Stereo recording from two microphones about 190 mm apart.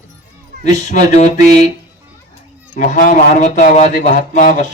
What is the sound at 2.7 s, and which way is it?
Speech, 45° left (ahead or behind).